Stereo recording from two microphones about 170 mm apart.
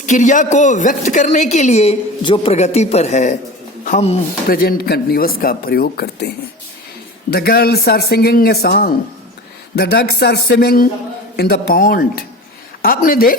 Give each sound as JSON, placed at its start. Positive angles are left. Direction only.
{"t": 0.0, "sound": "a woman's voice", "side_deg": 45}
{"t": 4.4, "sound": "speech", "side_deg": 60}
{"t": 7.3, "sound": "speech", "side_deg": 65}